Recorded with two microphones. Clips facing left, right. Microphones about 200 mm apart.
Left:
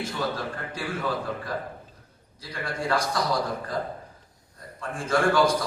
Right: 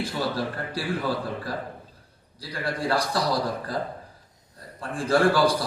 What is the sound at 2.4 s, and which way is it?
Speech, 35° right (ahead or behind).